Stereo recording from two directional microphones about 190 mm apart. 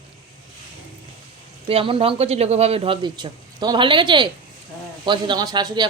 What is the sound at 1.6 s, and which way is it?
Speech, 30° right (ahead or behind).